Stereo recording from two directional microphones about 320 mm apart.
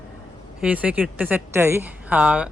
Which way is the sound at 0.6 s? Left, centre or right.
Centre.